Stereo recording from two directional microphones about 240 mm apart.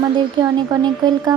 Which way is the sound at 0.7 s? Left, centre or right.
Centre.